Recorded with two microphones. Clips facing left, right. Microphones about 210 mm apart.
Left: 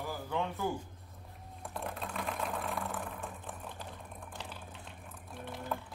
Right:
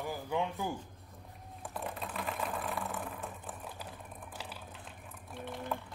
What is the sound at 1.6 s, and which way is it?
Sewing machine, centre (ahead or behind).